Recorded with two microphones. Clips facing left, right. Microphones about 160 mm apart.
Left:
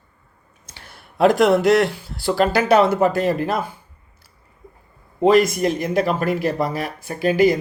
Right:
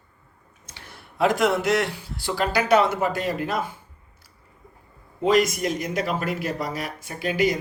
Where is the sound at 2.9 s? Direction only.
40° left (ahead or behind).